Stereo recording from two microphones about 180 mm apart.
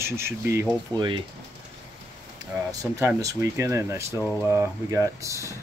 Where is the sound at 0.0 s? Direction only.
15° right (ahead or behind).